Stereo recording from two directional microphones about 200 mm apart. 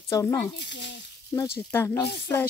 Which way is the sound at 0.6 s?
60° left (ahead or behind).